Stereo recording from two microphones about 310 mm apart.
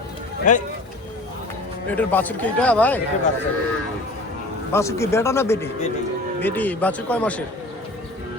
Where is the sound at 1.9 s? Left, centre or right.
Centre.